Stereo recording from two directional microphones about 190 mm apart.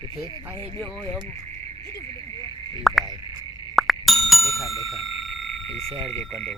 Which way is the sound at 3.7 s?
Centre (ahead or behind).